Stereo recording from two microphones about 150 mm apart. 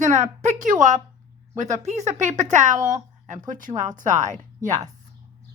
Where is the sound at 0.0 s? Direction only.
55° right (ahead or behind).